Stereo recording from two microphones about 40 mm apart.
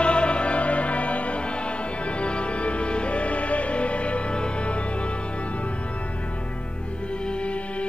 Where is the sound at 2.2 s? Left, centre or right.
Left.